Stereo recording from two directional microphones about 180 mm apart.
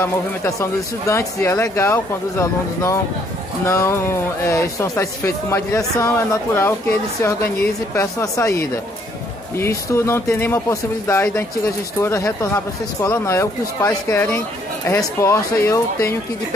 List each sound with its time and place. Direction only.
0.0 s speech: 15° left (ahead or behind)